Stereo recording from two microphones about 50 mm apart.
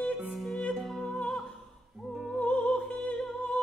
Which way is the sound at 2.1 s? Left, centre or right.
Centre.